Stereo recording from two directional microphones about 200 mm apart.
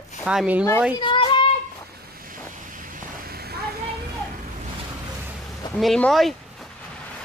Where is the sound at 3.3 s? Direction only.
50° right (ahead or behind).